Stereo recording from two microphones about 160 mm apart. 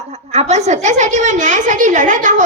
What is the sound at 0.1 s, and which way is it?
A woman's voice, 40° right (ahead or behind).